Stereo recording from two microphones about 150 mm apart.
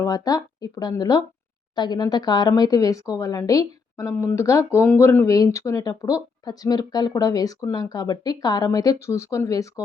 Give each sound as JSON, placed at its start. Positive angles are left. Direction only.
{"t": 0.0, "sound": "speech", "side_deg": 25}